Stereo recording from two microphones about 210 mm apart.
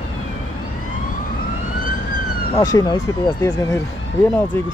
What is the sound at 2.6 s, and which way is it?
Speech, 20° left (ahead or behind).